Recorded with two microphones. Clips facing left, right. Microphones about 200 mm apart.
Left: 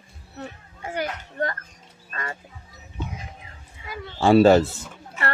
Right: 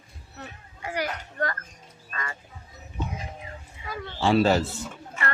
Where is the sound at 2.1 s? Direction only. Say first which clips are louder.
Left 2 dB; 40° left (ahead or behind).